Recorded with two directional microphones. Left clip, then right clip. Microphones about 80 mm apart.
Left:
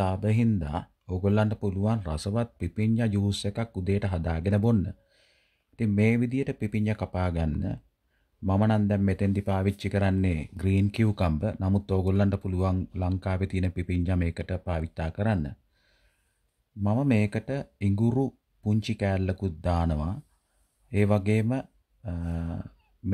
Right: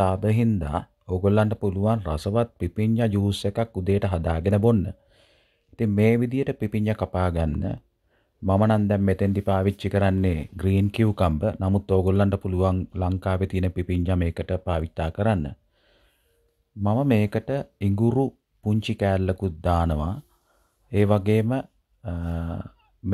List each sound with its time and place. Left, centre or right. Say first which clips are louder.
0.0 s speech: right 5 dB; right
17.0 s speech: right 4 dB; right